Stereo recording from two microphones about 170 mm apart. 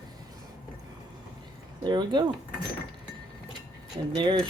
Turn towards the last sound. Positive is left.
turn(degrees=-25)  # may be behind; listen again after turning